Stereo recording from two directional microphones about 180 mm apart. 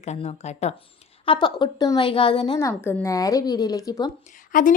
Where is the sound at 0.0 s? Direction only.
35° left (ahead or behind).